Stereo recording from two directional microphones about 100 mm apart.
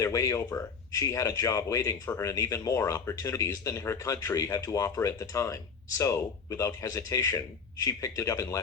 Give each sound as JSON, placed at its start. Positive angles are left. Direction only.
{"t": 0.0, "sound": "speech", "side_deg": 30}